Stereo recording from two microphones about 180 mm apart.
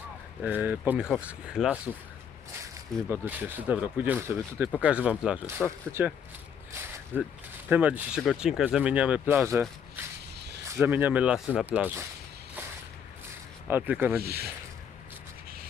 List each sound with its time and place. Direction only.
0.4 s speech: 10° right (ahead or behind)
3.1 s speech: 10° right (ahead or behind)
10.3 s a sound: 70° right (ahead or behind)
10.8 s speech: 10° right (ahead or behind)
13.7 s speech: 10° right (ahead or behind)
14.2 s speech: 60° right (ahead or behind)